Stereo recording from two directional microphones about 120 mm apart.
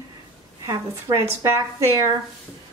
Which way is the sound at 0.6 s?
25° right (ahead or behind).